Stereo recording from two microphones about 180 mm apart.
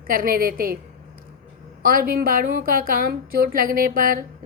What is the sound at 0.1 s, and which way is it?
Speech, 55° right (ahead or behind).